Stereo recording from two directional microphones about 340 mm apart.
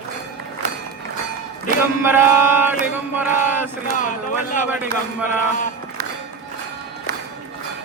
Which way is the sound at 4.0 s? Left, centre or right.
Left.